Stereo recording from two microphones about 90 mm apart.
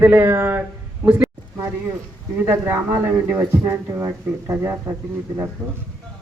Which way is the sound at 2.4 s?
30° right (ahead or behind).